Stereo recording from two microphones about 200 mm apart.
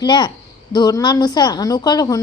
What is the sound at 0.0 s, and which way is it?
Speech, 20° left (ahead or behind).